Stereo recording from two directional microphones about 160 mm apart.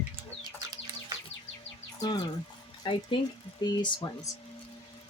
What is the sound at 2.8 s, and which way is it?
Speech, 30° left (ahead or behind).